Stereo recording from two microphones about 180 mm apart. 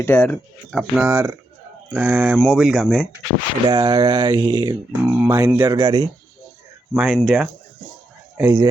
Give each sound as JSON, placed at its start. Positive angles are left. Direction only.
{"t": 0.0, "sound": "speech", "side_deg": 15}
{"t": 0.7, "sound": "speech", "side_deg": -5}
{"t": 3.7, "sound": "speech", "side_deg": -25}
{"t": 6.9, "sound": "speech", "side_deg": -5}
{"t": 8.4, "sound": "speech", "side_deg": -15}